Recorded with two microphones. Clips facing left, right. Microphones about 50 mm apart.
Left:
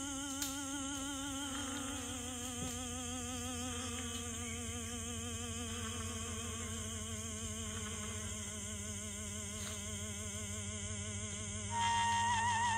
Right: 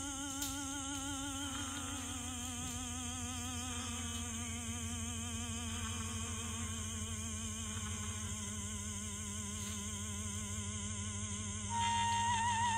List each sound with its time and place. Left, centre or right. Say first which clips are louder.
11.8 s music: left 1 dB; left